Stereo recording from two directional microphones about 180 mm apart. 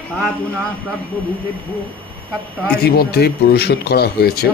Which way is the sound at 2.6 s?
60° left (ahead or behind).